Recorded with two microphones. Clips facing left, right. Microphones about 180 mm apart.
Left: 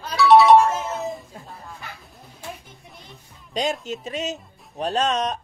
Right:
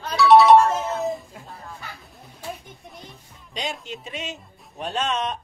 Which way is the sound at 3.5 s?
45° left (ahead or behind).